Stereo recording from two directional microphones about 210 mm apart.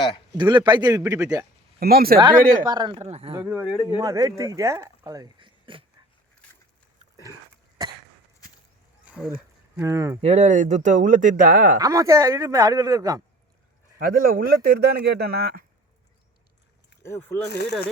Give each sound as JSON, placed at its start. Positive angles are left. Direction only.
{"t": 0.3, "sound": "a man's voice", "side_deg": -20}
{"t": 1.8, "sound": "speech", "side_deg": -45}
{"t": 2.2, "sound": "a man's voice", "side_deg": -20}
{"t": 3.4, "sound": "speech", "side_deg": -5}
{"t": 3.8, "sound": "speech", "side_deg": -15}
{"t": 7.8, "sound": "cough", "side_deg": -20}
{"t": 9.0, "sound": "a sound", "side_deg": -5}
{"t": 9.8, "sound": "speech", "side_deg": -15}
{"t": 10.2, "sound": "speech", "side_deg": -30}
{"t": 11.8, "sound": "speech", "side_deg": -15}
{"t": 14.0, "sound": "speech", "side_deg": -45}
{"t": 17.0, "sound": "speech", "side_deg": 10}
{"t": 17.5, "sound": "speech", "side_deg": 50}